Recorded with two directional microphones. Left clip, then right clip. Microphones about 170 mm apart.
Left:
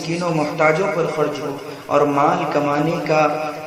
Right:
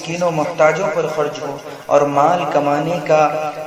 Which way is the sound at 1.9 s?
20° right (ahead or behind).